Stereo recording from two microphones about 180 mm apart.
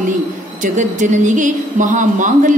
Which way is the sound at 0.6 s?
45° right (ahead or behind).